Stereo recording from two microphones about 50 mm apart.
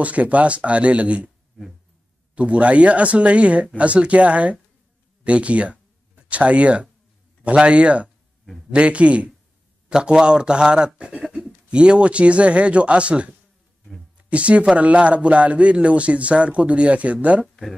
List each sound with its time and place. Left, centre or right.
0.0 s a man's voice: right
2.3 s a man's voice: right